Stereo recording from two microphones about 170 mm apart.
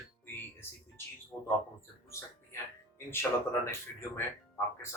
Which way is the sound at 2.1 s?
15° left (ahead or behind).